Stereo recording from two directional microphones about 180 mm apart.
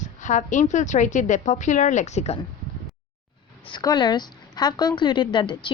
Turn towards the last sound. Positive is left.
turn(degrees=25)  # may be behind; listen again after turning